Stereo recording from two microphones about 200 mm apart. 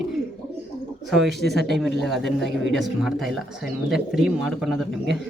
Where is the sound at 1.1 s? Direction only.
Centre (ahead or behind).